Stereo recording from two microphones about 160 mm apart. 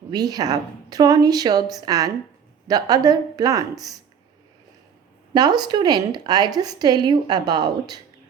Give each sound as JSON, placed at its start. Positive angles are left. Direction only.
{"t": 0.1, "sound": "a woman's voice", "side_deg": -25}
{"t": 5.3, "sound": "a woman's voice", "side_deg": -25}